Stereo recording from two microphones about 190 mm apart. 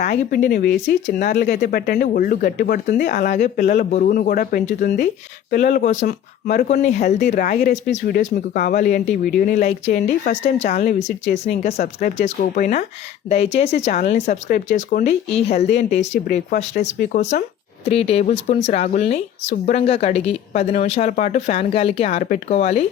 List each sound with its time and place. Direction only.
0.3 s speech: 55° left (ahead or behind); by 22.8 s 35° left (ahead or behind)